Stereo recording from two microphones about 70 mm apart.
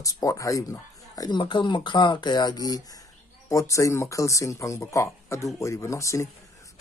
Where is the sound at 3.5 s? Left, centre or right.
Left.